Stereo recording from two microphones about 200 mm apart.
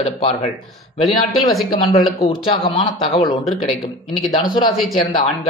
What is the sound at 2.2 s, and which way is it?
A man's voice, 30° left (ahead or behind).